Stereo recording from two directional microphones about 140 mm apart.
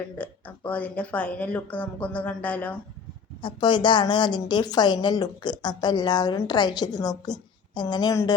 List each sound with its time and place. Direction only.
0.2 s speech: 10° left (ahead or behind)
3.4 s a woman's voice: 35° left (ahead or behind)